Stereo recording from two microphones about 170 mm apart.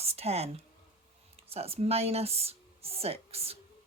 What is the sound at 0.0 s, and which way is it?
Speech, 35° right (ahead or behind).